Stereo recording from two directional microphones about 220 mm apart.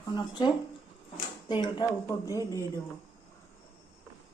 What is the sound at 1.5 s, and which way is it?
Speech, 20° left (ahead or behind).